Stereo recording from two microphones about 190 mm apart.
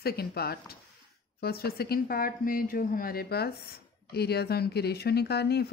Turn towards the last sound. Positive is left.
turn(degrees=60)  # may be behind; listen again after turning